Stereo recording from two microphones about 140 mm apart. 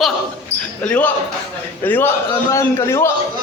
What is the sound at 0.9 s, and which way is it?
A man's voice, 10° left (ahead or behind).